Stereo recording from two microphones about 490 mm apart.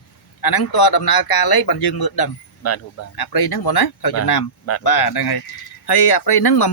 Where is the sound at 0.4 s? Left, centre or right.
Left.